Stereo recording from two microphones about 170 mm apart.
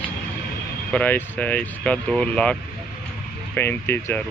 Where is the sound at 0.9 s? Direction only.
10° left (ahead or behind).